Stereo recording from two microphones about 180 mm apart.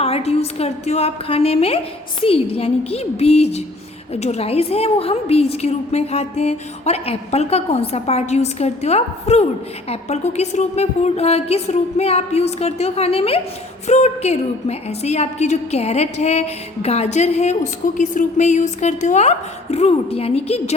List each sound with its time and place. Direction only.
0.0 s a woman's voice: 35° left (ahead or behind)